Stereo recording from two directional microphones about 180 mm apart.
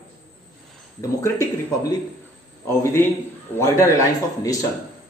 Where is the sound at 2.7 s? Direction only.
10° left (ahead or behind).